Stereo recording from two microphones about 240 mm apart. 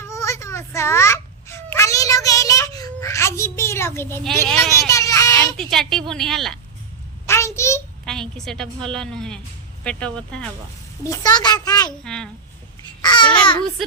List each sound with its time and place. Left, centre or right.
0.1 s babbling: centre
4.7 s a sound: centre
5.5 s speech: centre
7.3 s a sound: centre
9.8 s a child's voice: centre
12.0 s speech: centre
13.0 s babbling: centre
13.2 s a child's voice: centre